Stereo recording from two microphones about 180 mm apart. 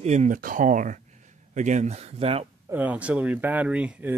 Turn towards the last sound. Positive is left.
turn(degrees=-10)  # may be behind; listen again after turning